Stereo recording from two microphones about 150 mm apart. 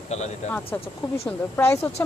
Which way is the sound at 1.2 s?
15° left (ahead or behind).